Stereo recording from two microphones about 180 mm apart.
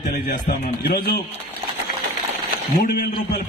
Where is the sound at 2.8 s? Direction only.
60° left (ahead or behind).